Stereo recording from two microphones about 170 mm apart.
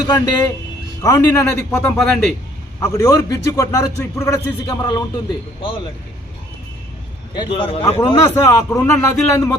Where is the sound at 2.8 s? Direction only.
15° left (ahead or behind).